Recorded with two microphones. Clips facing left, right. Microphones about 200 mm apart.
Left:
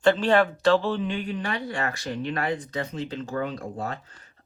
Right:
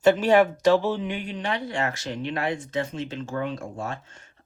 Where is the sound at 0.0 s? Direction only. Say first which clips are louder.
Right 2 dB; 10° right (ahead or behind).